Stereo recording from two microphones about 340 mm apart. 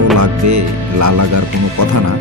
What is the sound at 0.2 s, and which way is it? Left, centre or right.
Speech, right.